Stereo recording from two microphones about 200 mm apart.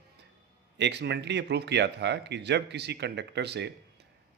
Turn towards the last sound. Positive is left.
turn(degrees=-60)  # may be behind; listen again after turning